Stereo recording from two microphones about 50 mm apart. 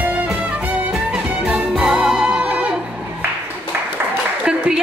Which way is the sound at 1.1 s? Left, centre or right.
Right.